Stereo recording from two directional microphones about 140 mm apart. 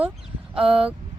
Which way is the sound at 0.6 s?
40° right (ahead or behind).